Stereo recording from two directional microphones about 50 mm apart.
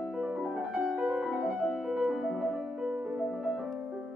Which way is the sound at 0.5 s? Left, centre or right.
Right.